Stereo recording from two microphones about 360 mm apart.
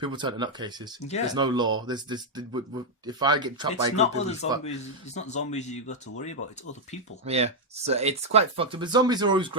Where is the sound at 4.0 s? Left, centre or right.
Centre.